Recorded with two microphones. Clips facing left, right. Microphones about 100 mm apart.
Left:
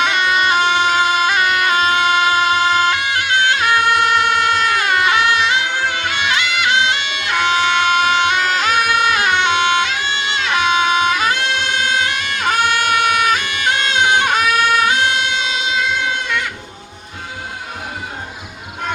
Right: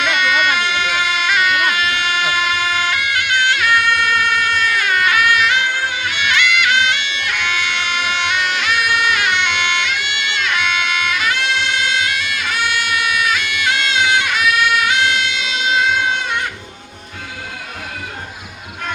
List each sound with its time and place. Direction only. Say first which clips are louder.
0.0 s bagpipes: left 1 dB; 35° left (ahead or behind)
11.6 s music: left 1 dB; 35° left (ahead or behind)